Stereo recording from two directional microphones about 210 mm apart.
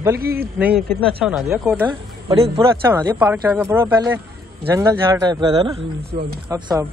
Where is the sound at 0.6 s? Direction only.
5° right (ahead or behind).